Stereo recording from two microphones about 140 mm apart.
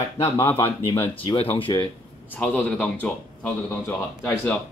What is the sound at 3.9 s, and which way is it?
Speech, 20° left (ahead or behind).